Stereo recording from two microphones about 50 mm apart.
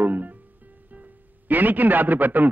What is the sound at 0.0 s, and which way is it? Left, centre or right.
Music, right.